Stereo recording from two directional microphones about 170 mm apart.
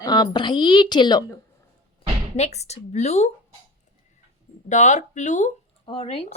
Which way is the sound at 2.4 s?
40° left (ahead or behind).